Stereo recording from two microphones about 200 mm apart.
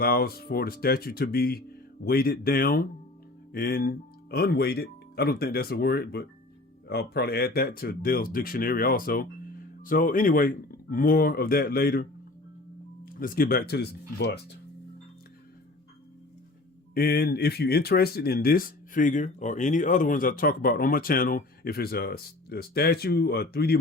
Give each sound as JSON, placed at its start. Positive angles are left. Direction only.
{"t": 0.0, "sound": "speech", "side_deg": 50}
{"t": 13.1, "sound": "speech", "side_deg": 45}
{"t": 16.9, "sound": "speech", "side_deg": 50}